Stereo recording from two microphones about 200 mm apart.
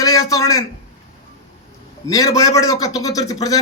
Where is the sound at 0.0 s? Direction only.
20° left (ahead or behind).